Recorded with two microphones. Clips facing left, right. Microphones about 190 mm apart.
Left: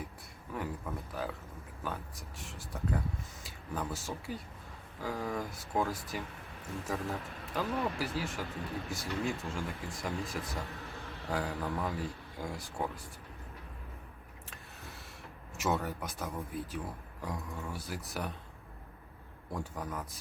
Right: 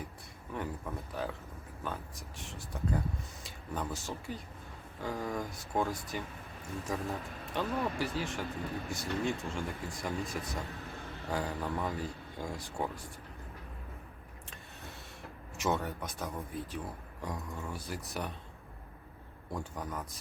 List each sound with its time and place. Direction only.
0.5 s speech: centre (ahead or behind)
10.8 s a sound: 15° right (ahead or behind)
11.3 s speech: centre (ahead or behind)
15.5 s speech: centre (ahead or behind)
19.5 s speech: centre (ahead or behind)